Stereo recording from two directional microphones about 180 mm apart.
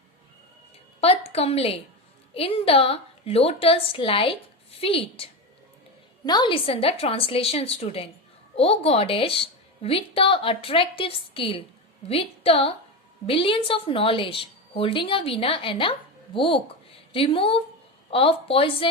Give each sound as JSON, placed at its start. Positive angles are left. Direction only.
{"t": 1.0, "sound": "a woman's voice", "side_deg": 35}